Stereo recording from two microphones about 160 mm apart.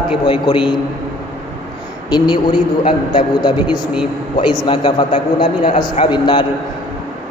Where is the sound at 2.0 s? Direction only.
30° left (ahead or behind).